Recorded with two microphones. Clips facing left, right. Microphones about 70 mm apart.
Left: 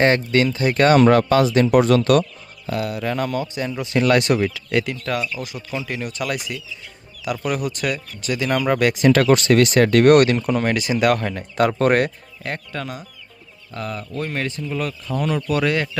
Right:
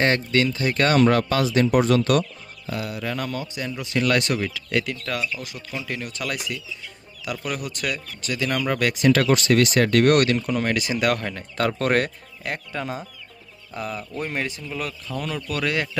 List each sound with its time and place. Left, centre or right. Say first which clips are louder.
0.0 s speech: left 4 dB; left
1.6 s speech: left 4 dB; left
3.6 s speech: left 3 dB; left
4.4 s speech: left 4 dB; centre
8.4 s speech: left 5 dB; left
9.3 s speech: left 4 dB; left
10.3 s speech: left 4 dB; left
10.8 s speech: left 4 dB; centre
14.7 s speech: left 5 dB; centre